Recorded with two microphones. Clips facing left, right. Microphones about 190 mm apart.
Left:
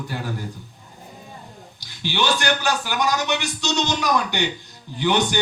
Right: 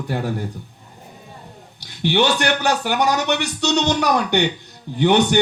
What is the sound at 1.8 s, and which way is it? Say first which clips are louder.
A man's voice: right 7 dB; 60° right (ahead or behind).